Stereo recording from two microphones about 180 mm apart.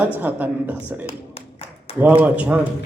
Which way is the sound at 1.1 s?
35° left (ahead or behind).